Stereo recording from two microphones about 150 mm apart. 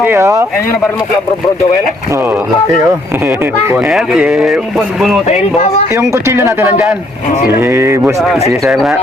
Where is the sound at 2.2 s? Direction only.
10° right (ahead or behind).